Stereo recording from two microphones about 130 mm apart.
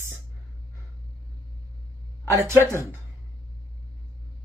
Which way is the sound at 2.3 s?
20° right (ahead or behind).